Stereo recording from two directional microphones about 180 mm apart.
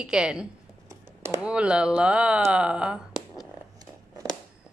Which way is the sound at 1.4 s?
5° right (ahead or behind).